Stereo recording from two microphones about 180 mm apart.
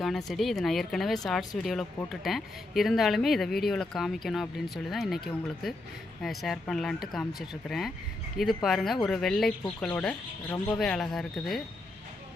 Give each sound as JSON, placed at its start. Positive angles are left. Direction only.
{"t": 0.0, "sound": "speech", "side_deg": 0}